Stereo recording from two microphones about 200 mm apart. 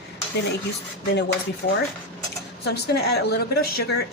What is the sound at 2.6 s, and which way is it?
Speech, 55° left (ahead or behind).